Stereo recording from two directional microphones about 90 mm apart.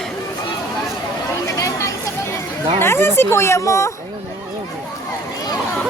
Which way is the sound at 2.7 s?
25° left (ahead or behind).